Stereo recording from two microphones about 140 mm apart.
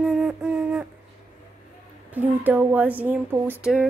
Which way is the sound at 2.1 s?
15° right (ahead or behind).